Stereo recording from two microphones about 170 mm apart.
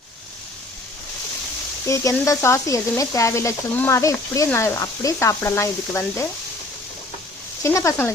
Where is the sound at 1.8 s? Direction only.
15° left (ahead or behind).